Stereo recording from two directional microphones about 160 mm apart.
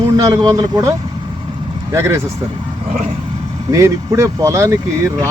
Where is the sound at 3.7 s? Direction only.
20° right (ahead or behind).